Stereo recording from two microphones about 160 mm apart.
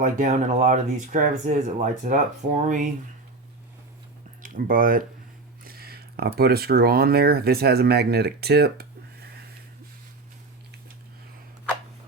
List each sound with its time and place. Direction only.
0.0 s speech: 50° right (ahead or behind)
4.4 s speech: 60° right (ahead or behind)
5.6 s speech: 75° right (ahead or behind); by 8.9 s 90° right